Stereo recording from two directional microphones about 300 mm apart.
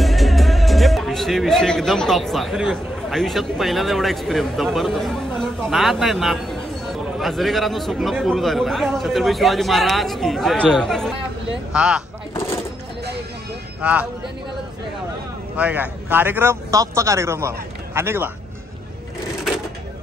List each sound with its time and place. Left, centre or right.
0.0 s speech: centre
13.7 s speech: centre
15.5 s a man's voice: centre